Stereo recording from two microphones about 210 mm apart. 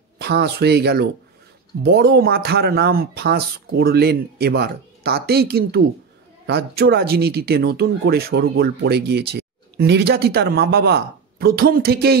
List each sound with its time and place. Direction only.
0.2 s speech: 50° right (ahead or behind)